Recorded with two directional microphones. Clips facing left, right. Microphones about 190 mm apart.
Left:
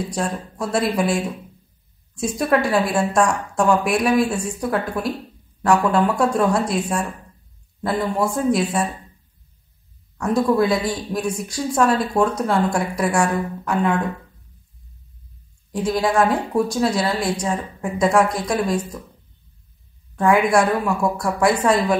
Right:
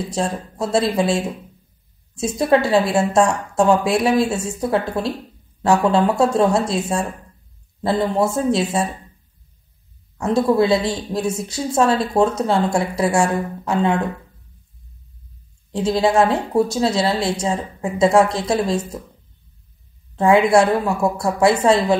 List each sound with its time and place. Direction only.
0.1 s a woman's voice: 25° right (ahead or behind)
7.8 s a woman's voice: 25° right (ahead or behind)
10.1 s a woman's voice: 25° right (ahead or behind)
15.7 s a woman's voice: 25° right (ahead or behind)
20.2 s a woman's voice: 25° right (ahead or behind)